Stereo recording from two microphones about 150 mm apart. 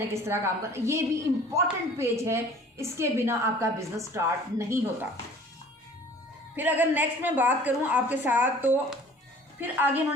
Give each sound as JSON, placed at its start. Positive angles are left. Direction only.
{"t": 0.1, "sound": "a woman's voice", "side_deg": -15}
{"t": 6.6, "sound": "a woman's voice", "side_deg": -10}